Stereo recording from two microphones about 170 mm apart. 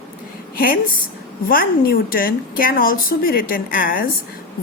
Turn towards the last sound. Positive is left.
turn(degrees=55)  # may be behind; listen again after turning